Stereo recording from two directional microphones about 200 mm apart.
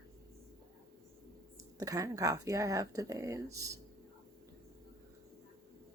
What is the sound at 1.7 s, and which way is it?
Speech, 15° right (ahead or behind).